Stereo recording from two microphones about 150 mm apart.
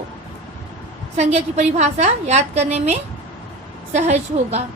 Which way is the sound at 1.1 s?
45° right (ahead or behind).